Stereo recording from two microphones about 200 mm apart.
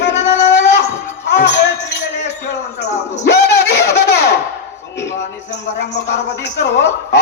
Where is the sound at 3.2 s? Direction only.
60° left (ahead or behind).